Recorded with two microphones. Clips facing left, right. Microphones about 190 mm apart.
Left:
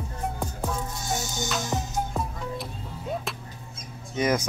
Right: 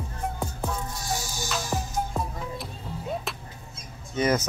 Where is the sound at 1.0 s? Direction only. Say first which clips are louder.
Left 2 dB; 20° left (ahead or behind).